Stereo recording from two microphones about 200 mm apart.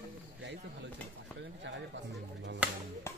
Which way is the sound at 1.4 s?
60° right (ahead or behind).